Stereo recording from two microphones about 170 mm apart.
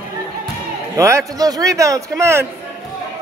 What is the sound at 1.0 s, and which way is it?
A man's voice, 20° right (ahead or behind).